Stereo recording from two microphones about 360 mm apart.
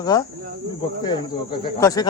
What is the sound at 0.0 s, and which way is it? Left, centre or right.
Speech, centre.